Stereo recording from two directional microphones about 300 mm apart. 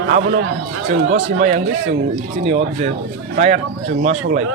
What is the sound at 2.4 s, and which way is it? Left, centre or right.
Speech, right.